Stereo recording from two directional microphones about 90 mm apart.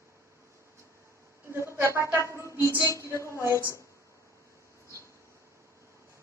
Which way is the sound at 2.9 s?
35° left (ahead or behind).